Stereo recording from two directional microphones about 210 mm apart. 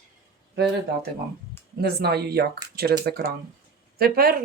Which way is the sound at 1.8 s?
50° right (ahead or behind).